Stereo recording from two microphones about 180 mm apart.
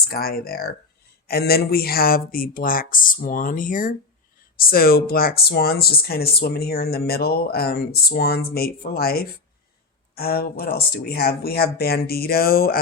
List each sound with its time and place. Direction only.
0.1 s speech: 60° left (ahead or behind)